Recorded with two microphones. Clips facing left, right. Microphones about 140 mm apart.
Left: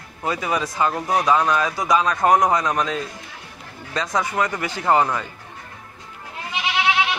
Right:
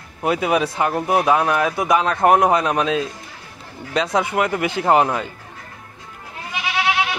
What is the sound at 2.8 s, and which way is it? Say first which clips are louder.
Speech: right 4 dB; 70° right (ahead or behind).